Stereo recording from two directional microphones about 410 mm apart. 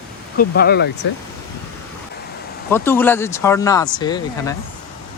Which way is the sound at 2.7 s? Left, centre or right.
Centre.